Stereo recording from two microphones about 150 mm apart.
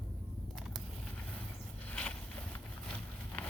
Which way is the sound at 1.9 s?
10° left (ahead or behind).